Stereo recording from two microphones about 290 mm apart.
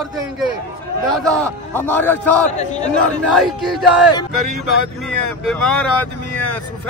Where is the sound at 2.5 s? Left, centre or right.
Left.